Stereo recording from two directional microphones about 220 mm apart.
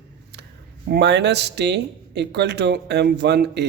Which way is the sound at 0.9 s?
50° right (ahead or behind).